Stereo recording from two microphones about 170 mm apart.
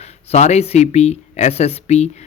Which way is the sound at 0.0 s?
40° left (ahead or behind).